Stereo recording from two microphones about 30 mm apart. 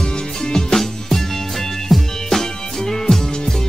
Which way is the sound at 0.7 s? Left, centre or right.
Centre.